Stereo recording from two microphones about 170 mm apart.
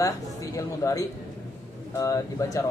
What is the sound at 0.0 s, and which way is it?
A man's voice, 20° left (ahead or behind).